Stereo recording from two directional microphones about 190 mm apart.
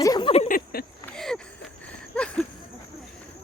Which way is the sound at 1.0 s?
5° left (ahead or behind).